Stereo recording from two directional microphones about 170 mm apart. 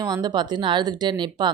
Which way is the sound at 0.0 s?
25° right (ahead or behind).